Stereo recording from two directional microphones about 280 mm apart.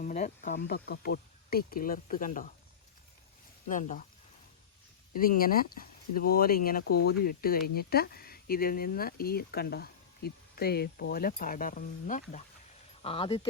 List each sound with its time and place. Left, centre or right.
0.0 s speech: left
3.7 s speech: left
5.1 s speech: left